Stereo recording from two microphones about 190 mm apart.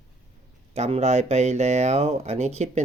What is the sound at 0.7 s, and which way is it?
Speech, 35° right (ahead or behind).